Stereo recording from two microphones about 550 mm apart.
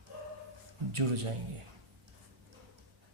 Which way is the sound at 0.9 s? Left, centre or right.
Right.